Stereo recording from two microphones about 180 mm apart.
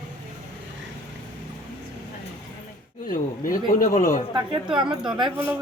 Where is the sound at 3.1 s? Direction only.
50° left (ahead or behind).